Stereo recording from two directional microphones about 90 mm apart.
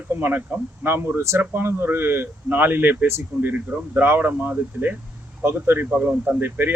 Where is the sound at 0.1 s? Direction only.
20° right (ahead or behind).